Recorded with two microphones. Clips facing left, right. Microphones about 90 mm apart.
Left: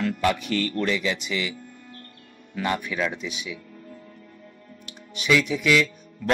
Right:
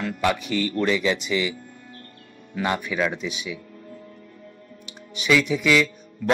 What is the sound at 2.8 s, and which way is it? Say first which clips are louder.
Speech: right 3 dB; 10° right (ahead or behind).